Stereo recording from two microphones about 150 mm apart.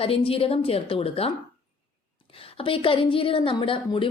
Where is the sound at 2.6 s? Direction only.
35° left (ahead or behind).